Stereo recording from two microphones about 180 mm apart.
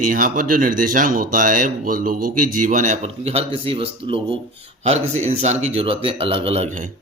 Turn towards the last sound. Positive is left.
turn(degrees=-45)  # may be behind; listen again after turning